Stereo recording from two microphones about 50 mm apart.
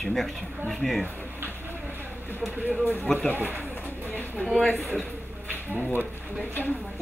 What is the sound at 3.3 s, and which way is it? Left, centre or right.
Speech, right.